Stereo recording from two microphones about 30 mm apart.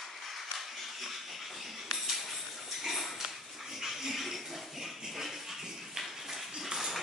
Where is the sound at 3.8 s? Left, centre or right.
Centre.